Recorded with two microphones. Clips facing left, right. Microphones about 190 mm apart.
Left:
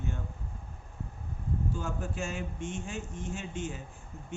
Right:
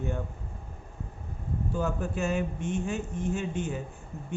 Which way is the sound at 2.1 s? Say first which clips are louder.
Right 7 dB; 60° right (ahead or behind).